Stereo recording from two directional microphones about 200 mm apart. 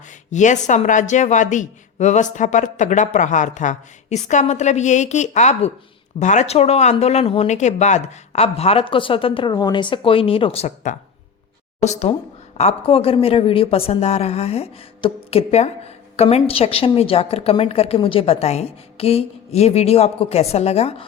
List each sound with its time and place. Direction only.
0.1 s speech: 35° left (ahead or behind)